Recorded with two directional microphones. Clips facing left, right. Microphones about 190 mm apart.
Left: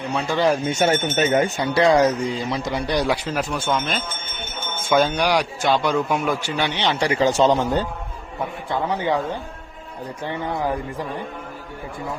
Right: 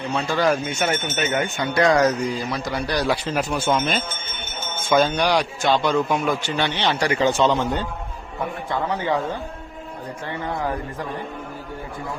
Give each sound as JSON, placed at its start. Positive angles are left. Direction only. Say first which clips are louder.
{"t": 0.1, "sound": "a man's voice", "louder": "even", "side_deg": 10}
{"t": 0.3, "sound": "speech", "louder": "left 2 dB", "side_deg": 30}
{"t": 3.1, "sound": "speech", "louder": "even", "side_deg": 0}
{"t": 4.9, "sound": "a man's voice", "louder": "even", "side_deg": 10}
{"t": 7.0, "sound": "speech", "louder": "left 2 dB", "side_deg": 30}
{"t": 8.7, "sound": "a man's voice", "louder": "left 2 dB", "side_deg": 10}